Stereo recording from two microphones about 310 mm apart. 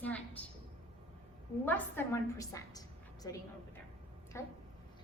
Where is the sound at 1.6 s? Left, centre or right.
Centre.